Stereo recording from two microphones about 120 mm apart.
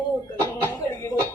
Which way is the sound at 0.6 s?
30° left (ahead or behind).